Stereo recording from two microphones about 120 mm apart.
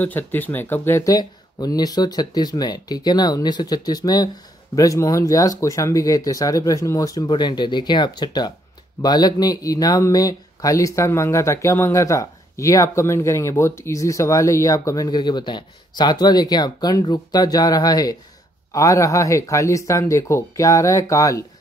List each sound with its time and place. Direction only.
0.0 s speech: 15° left (ahead or behind)
1.0 s speech: 30° left (ahead or behind)